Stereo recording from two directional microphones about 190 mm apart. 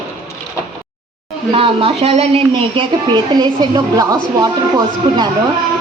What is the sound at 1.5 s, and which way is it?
Speech, 30° right (ahead or behind).